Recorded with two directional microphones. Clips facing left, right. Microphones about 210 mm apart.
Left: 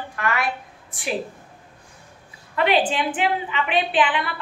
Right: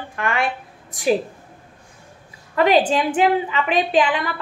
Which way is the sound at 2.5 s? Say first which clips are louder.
Right 4 dB; 40° right (ahead or behind).